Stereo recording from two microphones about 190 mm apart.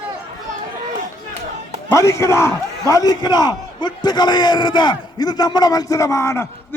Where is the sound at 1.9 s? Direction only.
15° left (ahead or behind).